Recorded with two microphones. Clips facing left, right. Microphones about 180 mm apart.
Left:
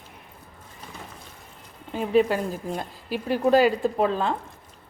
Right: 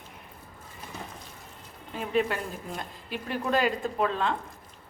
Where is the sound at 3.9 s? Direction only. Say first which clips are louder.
Left 4 dB; 40° left (ahead or behind).